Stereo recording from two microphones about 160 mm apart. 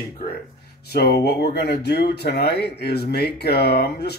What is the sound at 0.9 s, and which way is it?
Speech, 90° left.